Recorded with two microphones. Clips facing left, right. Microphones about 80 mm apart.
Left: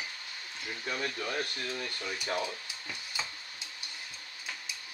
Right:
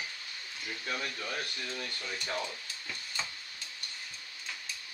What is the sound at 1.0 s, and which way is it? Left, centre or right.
Speech, left.